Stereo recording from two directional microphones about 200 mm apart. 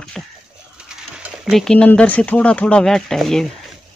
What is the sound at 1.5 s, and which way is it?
Speech, centre (ahead or behind).